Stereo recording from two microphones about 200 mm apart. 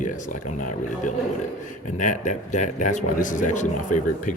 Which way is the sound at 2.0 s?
40° left (ahead or behind).